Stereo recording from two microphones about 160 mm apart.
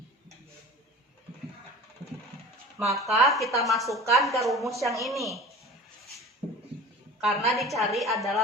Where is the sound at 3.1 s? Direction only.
Centre (ahead or behind).